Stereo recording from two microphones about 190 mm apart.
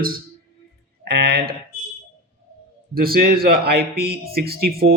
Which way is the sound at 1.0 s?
55° right (ahead or behind).